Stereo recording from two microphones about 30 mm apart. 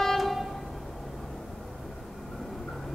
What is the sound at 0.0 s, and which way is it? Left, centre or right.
Train, centre.